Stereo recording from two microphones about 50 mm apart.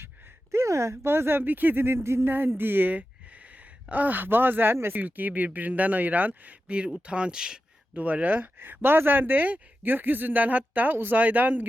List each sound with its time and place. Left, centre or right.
0.5 s speech: right
2.0 s a sound: right
2.6 s speech: right; by 7.6 s centre
7.9 s speech: right